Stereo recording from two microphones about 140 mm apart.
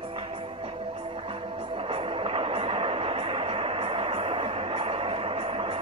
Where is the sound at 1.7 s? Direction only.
40° right (ahead or behind).